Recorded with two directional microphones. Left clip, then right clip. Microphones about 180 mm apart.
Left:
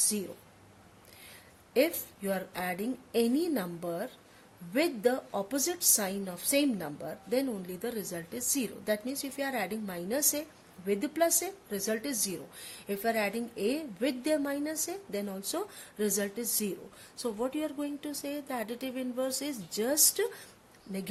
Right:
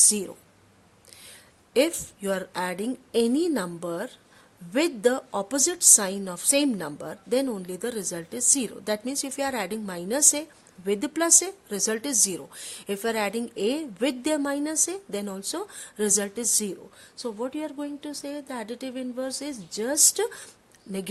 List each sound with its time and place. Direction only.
1.7 s a woman's voice: 45° right (ahead or behind)
17.2 s speech: 25° right (ahead or behind)